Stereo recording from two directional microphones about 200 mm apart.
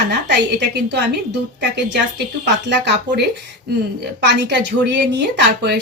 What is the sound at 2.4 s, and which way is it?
A woman's voice, 60° right (ahead or behind).